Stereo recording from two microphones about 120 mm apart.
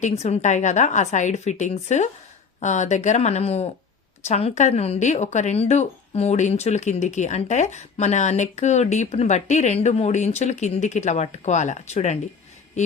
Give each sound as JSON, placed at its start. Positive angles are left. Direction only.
{"t": 0.0, "sound": "speech", "side_deg": 65}